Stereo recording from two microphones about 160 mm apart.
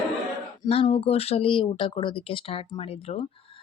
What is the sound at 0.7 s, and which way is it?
A woman's voice, 35° left (ahead or behind).